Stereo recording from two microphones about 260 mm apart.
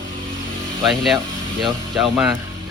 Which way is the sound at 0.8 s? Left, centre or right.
Centre.